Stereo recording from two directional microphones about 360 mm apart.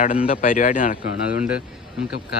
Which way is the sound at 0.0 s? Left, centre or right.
Left.